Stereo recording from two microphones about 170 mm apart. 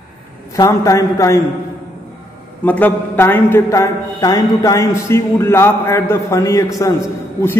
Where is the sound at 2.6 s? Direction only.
10° left (ahead or behind).